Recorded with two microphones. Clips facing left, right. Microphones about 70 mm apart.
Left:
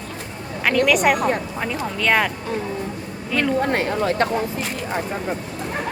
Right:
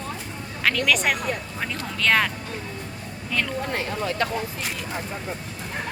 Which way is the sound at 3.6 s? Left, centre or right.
Left.